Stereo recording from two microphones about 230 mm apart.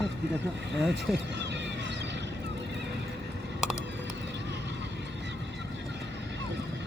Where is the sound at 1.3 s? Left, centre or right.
Right.